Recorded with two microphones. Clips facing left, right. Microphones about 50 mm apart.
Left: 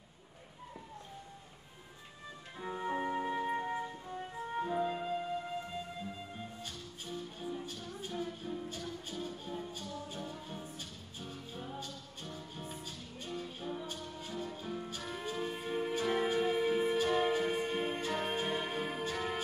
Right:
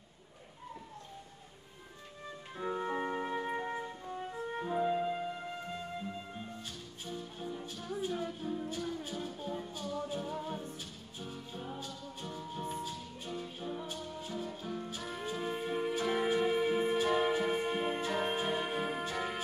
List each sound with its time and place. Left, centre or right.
2.5 s music: centre
7.1 s music: centre